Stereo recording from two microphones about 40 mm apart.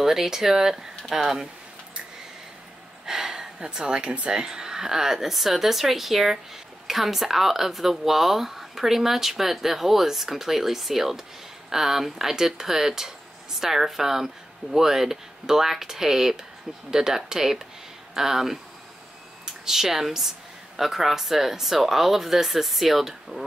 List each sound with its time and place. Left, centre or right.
0.0 s speech: centre
3.1 s a sound: centre
3.5 s a woman's voice: right; by 23.4 s centre